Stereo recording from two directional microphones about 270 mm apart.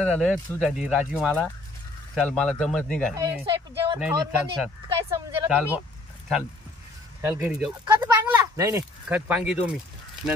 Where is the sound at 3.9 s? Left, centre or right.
Centre.